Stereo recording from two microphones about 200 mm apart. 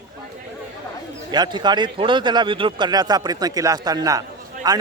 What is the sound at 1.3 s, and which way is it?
A man's voice, 20° right (ahead or behind).